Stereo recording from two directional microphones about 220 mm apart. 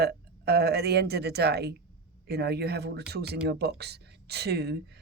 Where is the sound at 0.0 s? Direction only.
45° right (ahead or behind).